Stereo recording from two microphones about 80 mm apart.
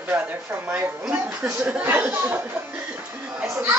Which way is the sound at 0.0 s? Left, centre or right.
Right.